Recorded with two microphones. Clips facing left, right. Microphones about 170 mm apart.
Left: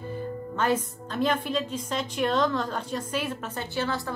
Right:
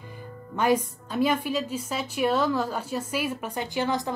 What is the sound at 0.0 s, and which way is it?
A woman's voice, 15° right (ahead or behind).